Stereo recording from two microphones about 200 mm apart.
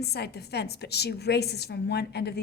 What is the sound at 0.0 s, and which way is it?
A woman's voice, 55° left (ahead or behind).